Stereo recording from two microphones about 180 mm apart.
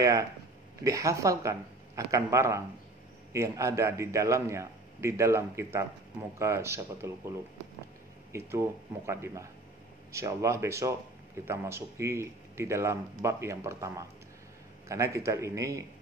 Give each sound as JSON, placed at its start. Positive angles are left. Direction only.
{"t": 0.0, "sound": "speech", "side_deg": -20}
{"t": 8.3, "sound": "speech", "side_deg": -15}